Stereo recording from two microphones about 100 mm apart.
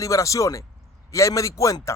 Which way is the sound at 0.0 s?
30° left (ahead or behind).